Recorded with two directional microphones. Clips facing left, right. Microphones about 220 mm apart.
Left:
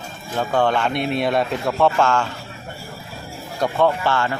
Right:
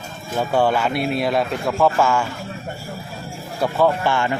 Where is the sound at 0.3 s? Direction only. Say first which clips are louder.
Right 1 dB; 10° right (ahead or behind).